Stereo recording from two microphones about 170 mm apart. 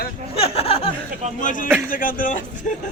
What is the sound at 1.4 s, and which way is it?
Speech, 50° left (ahead or behind).